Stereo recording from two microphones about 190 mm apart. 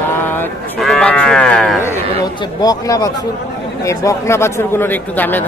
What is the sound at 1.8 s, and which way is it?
A man's voice, 15° left (ahead or behind).